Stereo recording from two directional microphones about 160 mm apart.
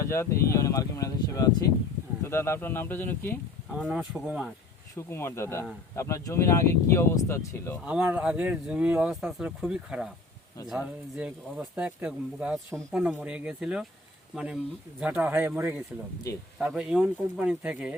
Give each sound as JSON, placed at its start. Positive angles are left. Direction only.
{"t": 0.0, "sound": "speech", "side_deg": 15}
{"t": 3.8, "sound": "speech", "side_deg": -5}
{"t": 4.9, "sound": "speech", "side_deg": 15}
{"t": 7.9, "sound": "speech", "side_deg": -10}